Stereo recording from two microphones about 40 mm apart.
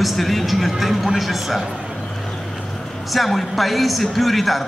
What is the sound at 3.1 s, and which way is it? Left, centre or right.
A man's voice, centre.